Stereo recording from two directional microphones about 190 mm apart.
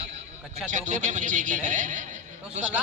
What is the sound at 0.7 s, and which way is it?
A man's voice, 40° right (ahead or behind).